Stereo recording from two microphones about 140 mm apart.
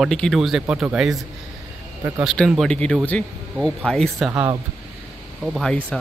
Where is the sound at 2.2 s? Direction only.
5° left (ahead or behind).